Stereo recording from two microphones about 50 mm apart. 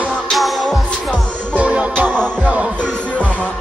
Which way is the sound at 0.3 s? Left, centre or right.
Centre.